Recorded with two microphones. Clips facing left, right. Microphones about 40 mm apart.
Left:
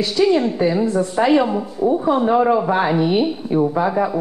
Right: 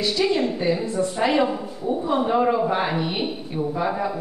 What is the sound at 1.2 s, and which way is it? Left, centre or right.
A man's voice, centre.